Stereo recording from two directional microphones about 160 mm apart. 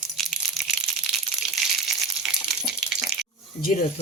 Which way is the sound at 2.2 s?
Centre (ahead or behind).